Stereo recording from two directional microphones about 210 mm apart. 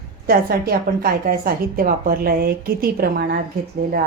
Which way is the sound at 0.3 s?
45° right (ahead or behind).